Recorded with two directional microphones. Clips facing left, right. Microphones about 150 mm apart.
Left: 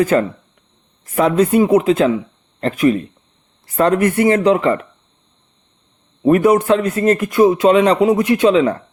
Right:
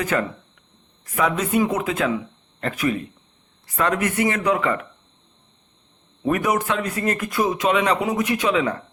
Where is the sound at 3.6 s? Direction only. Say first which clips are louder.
Left 8 dB; 35° left (ahead or behind).